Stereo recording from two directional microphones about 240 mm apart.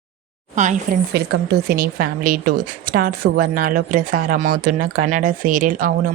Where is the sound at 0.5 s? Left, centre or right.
Right.